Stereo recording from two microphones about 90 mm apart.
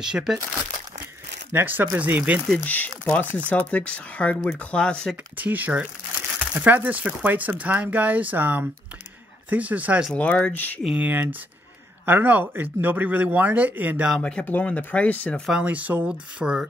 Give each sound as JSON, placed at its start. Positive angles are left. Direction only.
{"t": 0.0, "sound": "speech", "side_deg": -5}
{"t": 1.5, "sound": "speech", "side_deg": -20}
{"t": 2.6, "sound": "speech", "side_deg": 20}
{"t": 5.4, "sound": "speech", "side_deg": -20}
{"t": 10.1, "sound": "speech", "side_deg": 15}
{"t": 11.0, "sound": "speech", "side_deg": -20}
{"t": 14.2, "sound": "speech", "side_deg": 15}
{"t": 15.5, "sound": "speech", "side_deg": -15}